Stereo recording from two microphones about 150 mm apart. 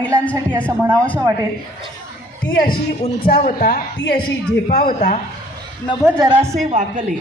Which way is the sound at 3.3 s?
70° left (ahead or behind).